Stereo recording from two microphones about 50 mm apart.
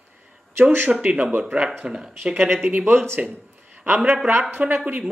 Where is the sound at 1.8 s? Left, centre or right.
Centre.